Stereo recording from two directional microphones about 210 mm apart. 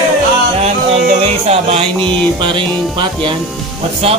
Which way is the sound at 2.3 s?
20° right (ahead or behind).